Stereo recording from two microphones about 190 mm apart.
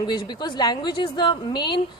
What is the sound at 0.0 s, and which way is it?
A woman's voice, 25° left (ahead or behind).